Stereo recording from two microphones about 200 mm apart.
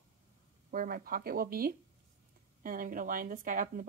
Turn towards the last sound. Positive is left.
turn(degrees=-45)  # may be behind; listen again after turning